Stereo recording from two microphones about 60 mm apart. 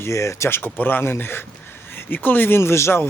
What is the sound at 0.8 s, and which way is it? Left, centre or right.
Speech, left.